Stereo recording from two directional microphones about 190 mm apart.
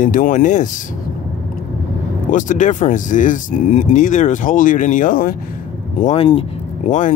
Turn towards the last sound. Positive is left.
turn(degrees=40)  # may be behind; listen again after turning